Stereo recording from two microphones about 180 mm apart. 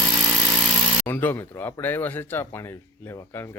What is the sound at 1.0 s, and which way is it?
Speech, 10° left (ahead or behind).